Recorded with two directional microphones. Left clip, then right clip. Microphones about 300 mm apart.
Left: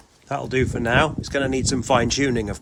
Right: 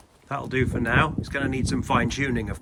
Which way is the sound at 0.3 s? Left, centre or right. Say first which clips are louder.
Left 3 dB; centre.